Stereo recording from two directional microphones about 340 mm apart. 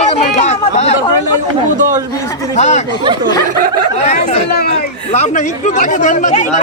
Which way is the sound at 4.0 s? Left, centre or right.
Left.